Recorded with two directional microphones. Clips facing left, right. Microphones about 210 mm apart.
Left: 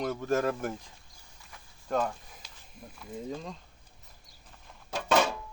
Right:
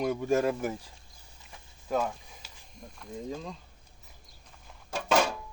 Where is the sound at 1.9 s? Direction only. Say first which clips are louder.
Even; 5° right (ahead or behind).